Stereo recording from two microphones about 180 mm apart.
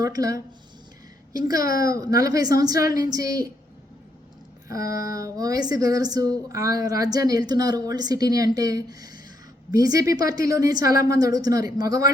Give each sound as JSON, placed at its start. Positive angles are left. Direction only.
{"t": 0.0, "sound": "a woman's voice", "side_deg": -20}
{"t": 4.9, "sound": "a woman's voice", "side_deg": -20}